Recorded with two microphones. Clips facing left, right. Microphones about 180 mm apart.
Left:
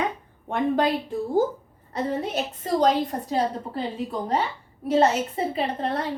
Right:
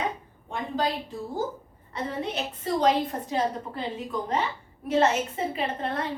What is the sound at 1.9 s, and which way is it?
A woman's voice, 40° left (ahead or behind).